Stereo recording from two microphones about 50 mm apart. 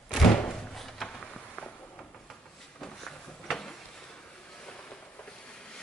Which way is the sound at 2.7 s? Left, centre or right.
Left.